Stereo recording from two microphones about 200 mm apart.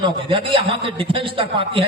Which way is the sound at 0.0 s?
25° right (ahead or behind).